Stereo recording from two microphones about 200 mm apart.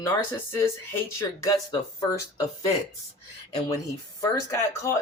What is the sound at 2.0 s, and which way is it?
Speech, 15° left (ahead or behind).